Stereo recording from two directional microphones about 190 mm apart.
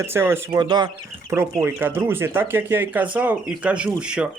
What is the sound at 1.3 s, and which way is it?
A man's voice, 10° right (ahead or behind).